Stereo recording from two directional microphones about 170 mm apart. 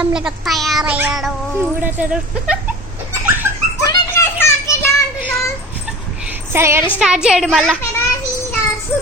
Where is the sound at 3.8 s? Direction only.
15° left (ahead or behind).